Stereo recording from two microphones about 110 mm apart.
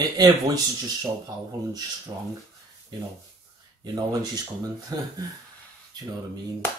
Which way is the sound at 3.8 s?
35° right (ahead or behind).